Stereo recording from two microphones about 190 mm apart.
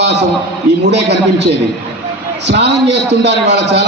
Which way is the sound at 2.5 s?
65° right (ahead or behind).